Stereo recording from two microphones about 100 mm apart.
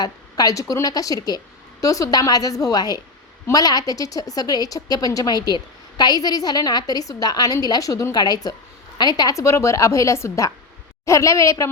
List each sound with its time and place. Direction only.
0.0 s a woman's voice: 40° left (ahead or behind)